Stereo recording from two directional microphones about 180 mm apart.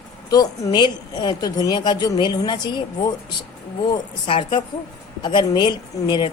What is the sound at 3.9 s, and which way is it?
A woman's voice, 30° left (ahead or behind).